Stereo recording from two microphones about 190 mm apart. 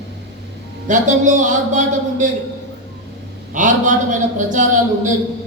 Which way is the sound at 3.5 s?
40° right (ahead or behind).